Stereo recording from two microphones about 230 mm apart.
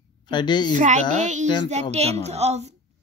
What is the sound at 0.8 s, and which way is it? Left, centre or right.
A woman's voice, right.